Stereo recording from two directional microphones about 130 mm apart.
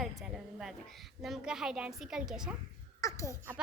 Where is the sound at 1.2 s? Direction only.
5° right (ahead or behind).